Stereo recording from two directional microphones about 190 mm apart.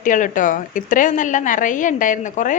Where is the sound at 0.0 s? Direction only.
45° left (ahead or behind).